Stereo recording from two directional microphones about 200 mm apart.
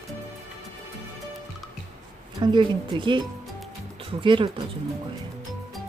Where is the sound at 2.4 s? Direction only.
25° right (ahead or behind).